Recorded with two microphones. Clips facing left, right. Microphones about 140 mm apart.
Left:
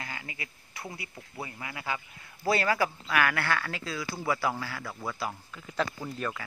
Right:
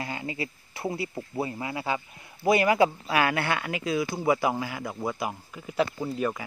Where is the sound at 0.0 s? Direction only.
25° right (ahead or behind).